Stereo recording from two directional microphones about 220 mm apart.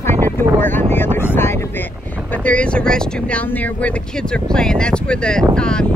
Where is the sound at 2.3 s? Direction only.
5° left (ahead or behind).